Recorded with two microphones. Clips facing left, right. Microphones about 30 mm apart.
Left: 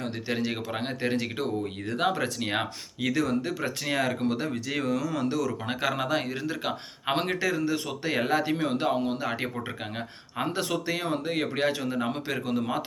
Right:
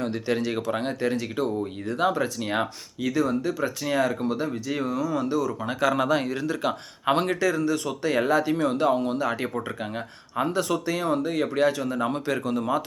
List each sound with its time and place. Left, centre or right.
0.0 s speech: centre
1.1 s speech: left
2.4 s speech: left
5.9 s speech: centre
10.5 s speech: left
12.0 s speech: centre